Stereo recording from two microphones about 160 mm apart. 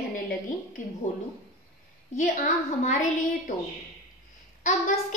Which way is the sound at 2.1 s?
50° left (ahead or behind).